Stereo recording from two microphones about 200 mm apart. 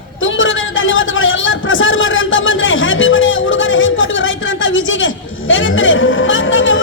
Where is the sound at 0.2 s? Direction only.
75° left (ahead or behind).